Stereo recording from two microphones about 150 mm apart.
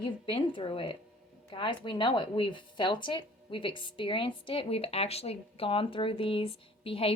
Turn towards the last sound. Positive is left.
turn(degrees=40)  # may be behind; listen again after turning